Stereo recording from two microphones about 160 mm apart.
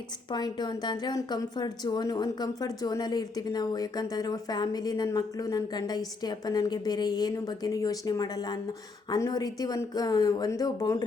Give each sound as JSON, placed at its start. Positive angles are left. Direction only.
{"t": 0.3, "sound": "a woman's voice", "side_deg": 25}